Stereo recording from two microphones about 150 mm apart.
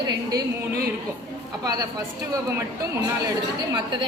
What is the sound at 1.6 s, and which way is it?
Speech, 25° right (ahead or behind).